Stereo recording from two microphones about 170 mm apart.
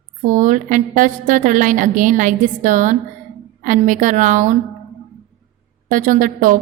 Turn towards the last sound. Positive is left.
turn(degrees=-50)  # may be behind; listen again after turning